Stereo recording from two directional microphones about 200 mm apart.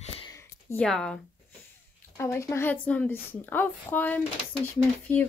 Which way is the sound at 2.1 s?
15° left (ahead or behind).